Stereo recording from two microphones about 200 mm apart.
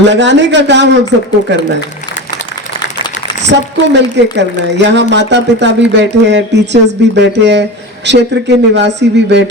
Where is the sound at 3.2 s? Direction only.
60° left (ahead or behind).